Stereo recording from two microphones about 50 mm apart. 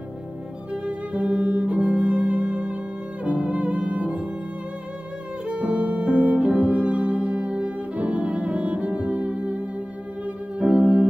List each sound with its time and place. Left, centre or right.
1.2 s music: centre
2.0 s music: right
5.6 s music: right
7.9 s music: right
10.8 s keyboard: centre